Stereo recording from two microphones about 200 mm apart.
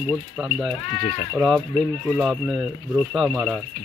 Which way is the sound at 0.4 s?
Centre (ahead or behind).